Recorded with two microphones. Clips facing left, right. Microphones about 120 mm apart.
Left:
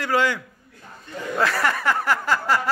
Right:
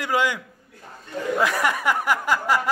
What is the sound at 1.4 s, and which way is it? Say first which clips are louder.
A man's voice: left 2 dB; 15° right (ahead or behind).